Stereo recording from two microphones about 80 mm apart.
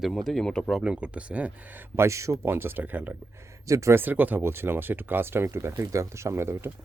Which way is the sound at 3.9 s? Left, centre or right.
Right.